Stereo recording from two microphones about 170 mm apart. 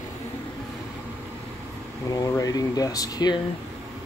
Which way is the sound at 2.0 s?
20° left (ahead or behind).